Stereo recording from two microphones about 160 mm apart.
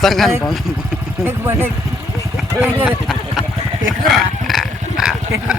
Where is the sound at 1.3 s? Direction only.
15° right (ahead or behind).